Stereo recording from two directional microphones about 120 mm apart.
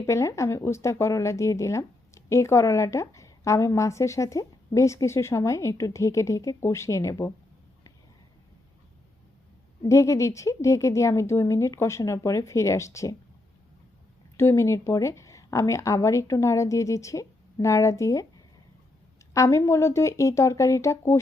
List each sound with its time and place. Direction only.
0.0 s speech: 25° left (ahead or behind)
9.8 s speech: 25° left (ahead or behind)
14.3 s speech: 25° left (ahead or behind)